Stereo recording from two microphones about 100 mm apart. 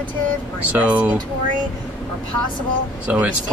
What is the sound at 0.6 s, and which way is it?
Speech, 15° right (ahead or behind).